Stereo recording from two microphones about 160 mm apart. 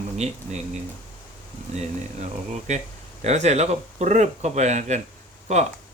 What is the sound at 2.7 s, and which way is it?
Speech, 45° right (ahead or behind).